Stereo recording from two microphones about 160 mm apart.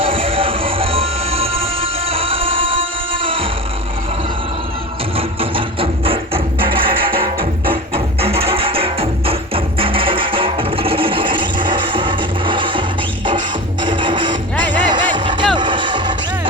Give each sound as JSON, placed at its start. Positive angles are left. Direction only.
{"t": 0.0, "sound": "music", "side_deg": -35}
{"t": 5.1, "sound": "music", "side_deg": -35}
{"t": 13.8, "sound": "music", "side_deg": -30}